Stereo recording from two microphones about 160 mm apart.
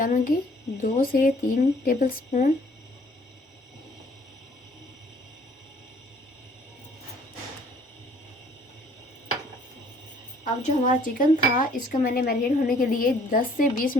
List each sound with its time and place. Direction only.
0.0 s speech: 60° left (ahead or behind)
10.4 s speech: 50° left (ahead or behind)